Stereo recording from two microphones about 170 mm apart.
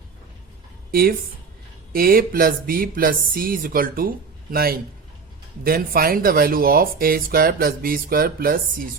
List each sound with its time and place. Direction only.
0.9 s speech: 60° right (ahead or behind)